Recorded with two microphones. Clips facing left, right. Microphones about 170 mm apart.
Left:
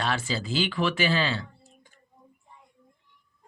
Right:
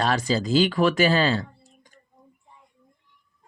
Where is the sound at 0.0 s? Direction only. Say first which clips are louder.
Right 6 dB; 40° right (ahead or behind).